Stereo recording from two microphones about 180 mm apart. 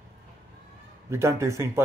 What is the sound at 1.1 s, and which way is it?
Speech, 15° right (ahead or behind).